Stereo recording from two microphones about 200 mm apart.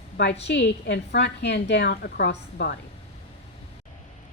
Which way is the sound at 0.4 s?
60° left (ahead or behind).